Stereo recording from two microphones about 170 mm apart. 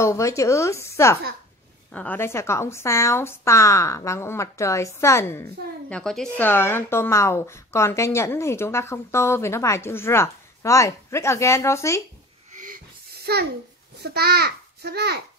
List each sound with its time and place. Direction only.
0.0 s a woman's voice: 15° left (ahead or behind)
12.5 s a sound: 55° right (ahead or behind); by 13.5 s 70° right (ahead or behind)
14.0 s a child's voice: 70° right (ahead or behind)